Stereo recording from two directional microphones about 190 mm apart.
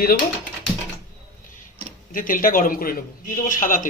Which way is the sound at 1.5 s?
45° left (ahead or behind).